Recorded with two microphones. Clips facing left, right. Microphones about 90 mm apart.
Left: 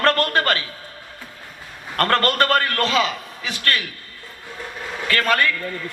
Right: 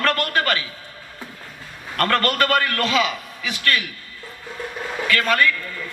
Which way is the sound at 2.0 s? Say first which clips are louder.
Left 1 dB; 35° left (ahead or behind).